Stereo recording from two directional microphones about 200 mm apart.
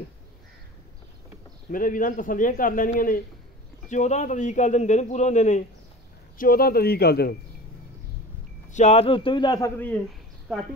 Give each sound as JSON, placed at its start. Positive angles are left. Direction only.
{"t": 1.7, "sound": "a man's voice", "side_deg": 45}
{"t": 8.6, "sound": "a man's voice", "side_deg": 35}